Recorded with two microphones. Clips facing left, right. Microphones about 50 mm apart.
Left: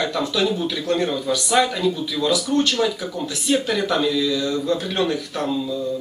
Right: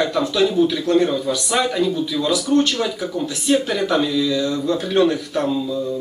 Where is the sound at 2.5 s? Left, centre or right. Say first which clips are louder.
Right 2 dB; right.